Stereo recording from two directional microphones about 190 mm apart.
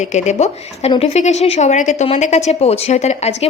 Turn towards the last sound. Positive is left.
turn(degrees=35)  # may be behind; listen again after turning